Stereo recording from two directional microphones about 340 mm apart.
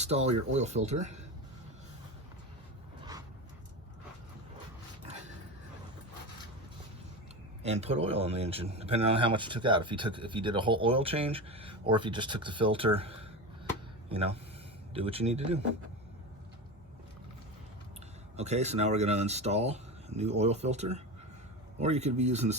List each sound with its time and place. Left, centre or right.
0.0 s speech: centre
7.6 s speech: centre
18.3 s speech: centre